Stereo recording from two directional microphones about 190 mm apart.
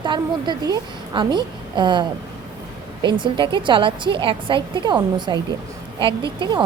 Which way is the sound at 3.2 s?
25° right (ahead or behind).